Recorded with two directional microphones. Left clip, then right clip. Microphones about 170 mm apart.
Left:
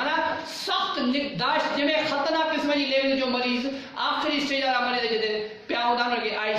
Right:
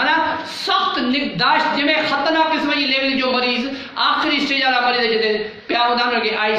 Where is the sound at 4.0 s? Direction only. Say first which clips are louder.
Right 9 dB; 20° left (ahead or behind).